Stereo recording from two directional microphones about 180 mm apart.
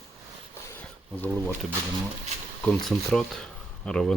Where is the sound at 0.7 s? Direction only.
10° left (ahead or behind).